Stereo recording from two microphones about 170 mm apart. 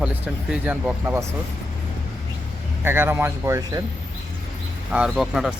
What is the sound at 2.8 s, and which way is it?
Speech, 15° right (ahead or behind).